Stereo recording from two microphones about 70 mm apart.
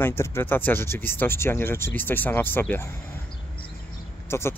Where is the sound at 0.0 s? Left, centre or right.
Left.